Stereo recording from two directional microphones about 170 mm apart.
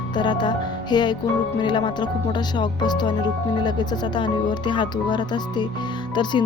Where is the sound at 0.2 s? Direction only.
25° left (ahead or behind).